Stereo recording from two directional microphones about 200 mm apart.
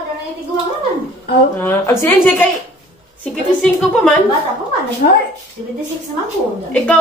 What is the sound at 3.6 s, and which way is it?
Speech, 5° left (ahead or behind).